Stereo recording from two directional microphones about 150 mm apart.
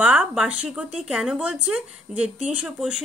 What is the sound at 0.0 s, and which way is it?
Speech, 10° right (ahead or behind).